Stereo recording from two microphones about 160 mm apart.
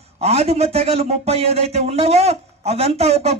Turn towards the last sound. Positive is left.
turn(degrees=-40)  # may be behind; listen again after turning